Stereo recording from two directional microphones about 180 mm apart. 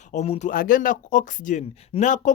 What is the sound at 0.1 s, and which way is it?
Speech, 40° left (ahead or behind).